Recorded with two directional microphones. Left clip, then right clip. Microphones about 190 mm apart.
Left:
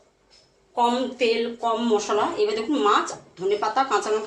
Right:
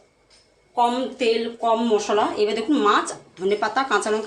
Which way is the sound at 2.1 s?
25° right (ahead or behind).